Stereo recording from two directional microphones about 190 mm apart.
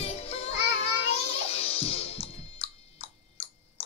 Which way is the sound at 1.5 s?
30° left (ahead or behind).